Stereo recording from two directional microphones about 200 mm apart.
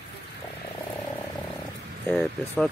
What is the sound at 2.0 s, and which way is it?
Speech, 5° left (ahead or behind).